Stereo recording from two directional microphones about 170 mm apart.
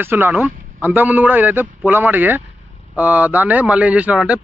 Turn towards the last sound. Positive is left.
turn(degrees=-5)  # may be behind; listen again after turning